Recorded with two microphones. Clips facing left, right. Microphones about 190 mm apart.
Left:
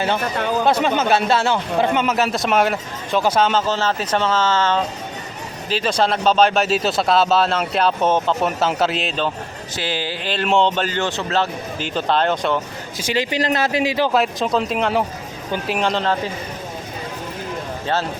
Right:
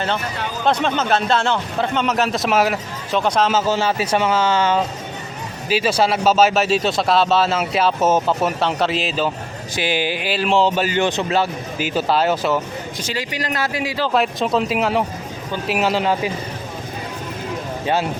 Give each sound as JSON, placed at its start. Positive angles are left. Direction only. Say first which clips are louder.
{"t": 0.2, "sound": "speech", "louder": "left 5 dB", "side_deg": 50}
{"t": 0.6, "sound": "speech", "louder": "even", "side_deg": 10}
{"t": 9.7, "sound": "speech", "louder": "right 4 dB", "side_deg": -15}
{"t": 13.1, "sound": "speech", "louder": "left 7 dB", "side_deg": 25}
{"t": 14.1, "sound": "speech", "louder": "even", "side_deg": 0}